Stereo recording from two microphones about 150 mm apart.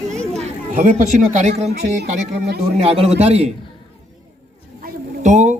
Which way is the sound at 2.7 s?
40° right (ahead or behind).